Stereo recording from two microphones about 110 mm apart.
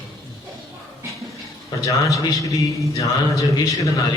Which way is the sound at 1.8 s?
30° left (ahead or behind).